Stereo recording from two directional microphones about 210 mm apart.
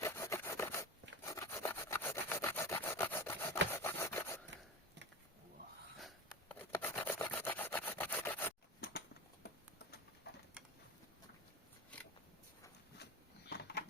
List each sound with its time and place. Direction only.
0.0 s rub: 15° left (ahead or behind)
1.2 s wood: 15° left (ahead or behind)
3.7 s rub: 10° left (ahead or behind)
6.6 s rub: 10° left (ahead or behind)
8.8 s a sound: 50° left (ahead or behind)
10.3 s pigeon: 50° left (ahead or behind)
12.9 s dog: 50° left (ahead or behind)
13.5 s a sound: 50° left (ahead or behind)